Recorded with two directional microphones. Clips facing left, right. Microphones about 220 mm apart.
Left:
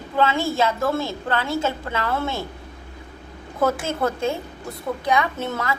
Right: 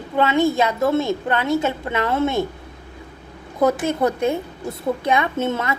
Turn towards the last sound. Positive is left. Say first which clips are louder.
# right 4 dB
turn(degrees=-25)  # may be behind; listen again after turning